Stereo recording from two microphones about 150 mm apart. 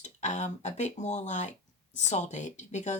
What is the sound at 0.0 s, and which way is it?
Speech, 50° left (ahead or behind).